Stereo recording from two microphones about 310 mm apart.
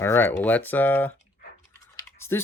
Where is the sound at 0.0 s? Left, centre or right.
Centre.